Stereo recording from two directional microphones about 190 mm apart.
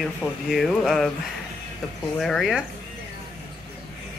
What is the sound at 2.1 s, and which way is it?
Speech, centre (ahead or behind).